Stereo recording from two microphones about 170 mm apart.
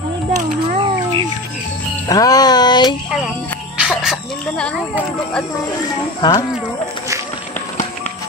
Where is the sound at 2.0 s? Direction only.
20° left (ahead or behind).